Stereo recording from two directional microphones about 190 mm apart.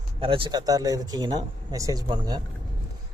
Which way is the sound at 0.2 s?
30° right (ahead or behind).